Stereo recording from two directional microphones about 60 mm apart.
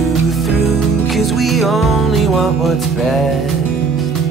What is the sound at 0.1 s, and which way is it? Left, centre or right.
Music, centre.